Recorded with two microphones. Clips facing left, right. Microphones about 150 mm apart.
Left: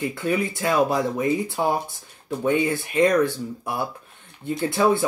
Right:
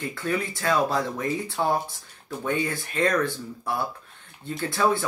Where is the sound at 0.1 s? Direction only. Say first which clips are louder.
Left 4 dB; 20° left (ahead or behind).